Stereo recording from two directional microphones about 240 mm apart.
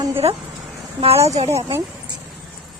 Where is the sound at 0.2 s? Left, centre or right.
Right.